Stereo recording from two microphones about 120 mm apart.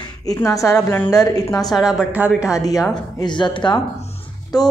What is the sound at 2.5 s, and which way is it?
A woman's voice, 30° left (ahead or behind).